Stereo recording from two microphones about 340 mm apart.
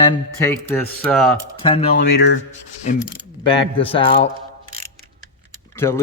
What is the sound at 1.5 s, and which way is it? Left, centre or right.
Speech, centre.